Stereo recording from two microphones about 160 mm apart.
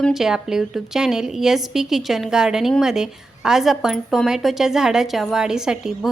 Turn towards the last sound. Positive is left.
turn(degrees=-5)  # may be behind; listen again after turning